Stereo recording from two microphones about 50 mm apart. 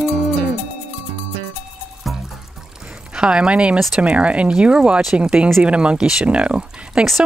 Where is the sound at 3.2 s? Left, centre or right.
Centre.